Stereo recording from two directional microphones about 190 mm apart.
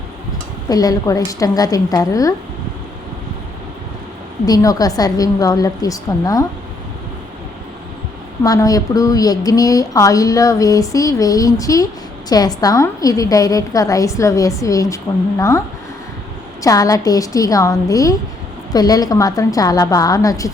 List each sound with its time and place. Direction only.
0.7 s a woman's voice: 20° left (ahead or behind)
4.4 s a woman's voice: 20° left (ahead or behind)
8.4 s speech: 20° left (ahead or behind)
16.6 s a woman's voice: 20° left (ahead or behind)